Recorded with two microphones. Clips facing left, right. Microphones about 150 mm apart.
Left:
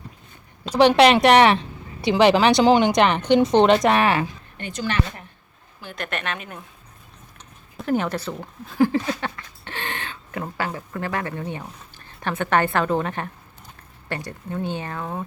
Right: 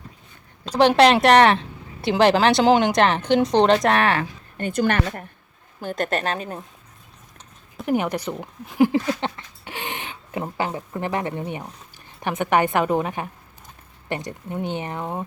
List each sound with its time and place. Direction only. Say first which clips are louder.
0.8 s speech: left 1 dB; centre (ahead or behind)
4.5 s speech: right 5 dB; 50° right (ahead or behind)
7.9 s speech: right 1 dB; 15° right (ahead or behind)